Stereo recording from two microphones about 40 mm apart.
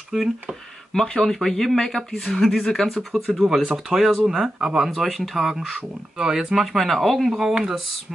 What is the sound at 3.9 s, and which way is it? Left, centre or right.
Speech, right.